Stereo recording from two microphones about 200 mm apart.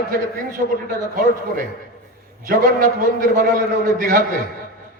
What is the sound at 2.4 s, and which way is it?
A man's voice, 45° right (ahead or behind).